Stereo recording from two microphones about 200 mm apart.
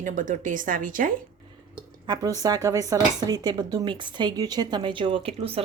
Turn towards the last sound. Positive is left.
turn(degrees=-30)  # may be behind; listen again after turning